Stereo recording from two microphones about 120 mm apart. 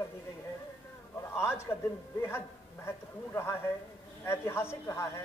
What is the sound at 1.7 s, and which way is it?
Speech, 30° left (ahead or behind).